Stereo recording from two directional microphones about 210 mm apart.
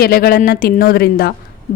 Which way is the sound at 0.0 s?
45° left (ahead or behind).